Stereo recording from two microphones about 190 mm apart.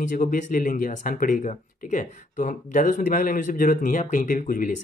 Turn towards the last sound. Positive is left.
turn(degrees=45)  # may be behind; listen again after turning